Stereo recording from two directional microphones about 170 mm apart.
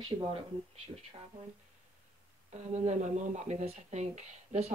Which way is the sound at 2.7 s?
40° right (ahead or behind).